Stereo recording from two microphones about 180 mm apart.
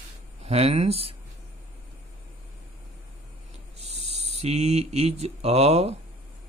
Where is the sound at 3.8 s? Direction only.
35° right (ahead or behind).